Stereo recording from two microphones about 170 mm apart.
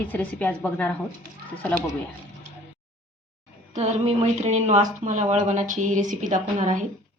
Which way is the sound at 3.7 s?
40° right (ahead or behind).